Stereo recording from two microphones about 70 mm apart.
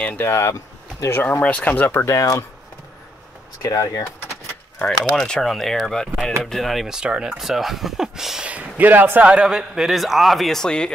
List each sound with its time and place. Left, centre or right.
0.2 s speech: left
1.4 s speech: left
2.0 s speech: left
3.6 s speech: left
4.7 s speech: centre
8.5 s speech: right; by 10.9 s centre